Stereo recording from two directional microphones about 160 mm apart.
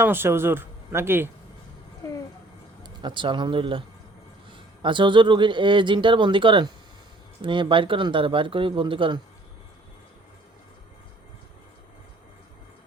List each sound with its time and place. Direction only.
0.0 s speech: 15° right (ahead or behind)
2.8 s speech: 30° right (ahead or behind)